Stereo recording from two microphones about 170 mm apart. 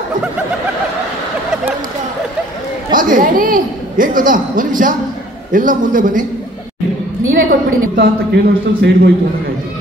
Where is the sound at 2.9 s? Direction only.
50° right (ahead or behind).